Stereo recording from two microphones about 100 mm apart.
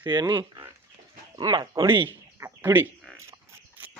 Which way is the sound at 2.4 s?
25° right (ahead or behind).